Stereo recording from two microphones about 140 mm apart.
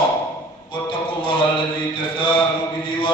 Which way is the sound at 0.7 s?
35° left (ahead or behind).